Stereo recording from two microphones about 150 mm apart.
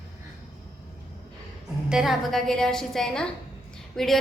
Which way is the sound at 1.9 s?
5° right (ahead or behind).